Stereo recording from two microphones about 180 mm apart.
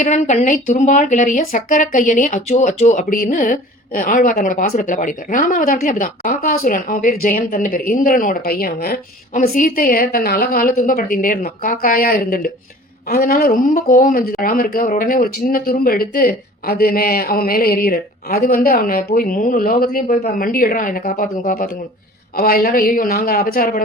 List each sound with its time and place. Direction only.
0.0 s speech: 40° left (ahead or behind)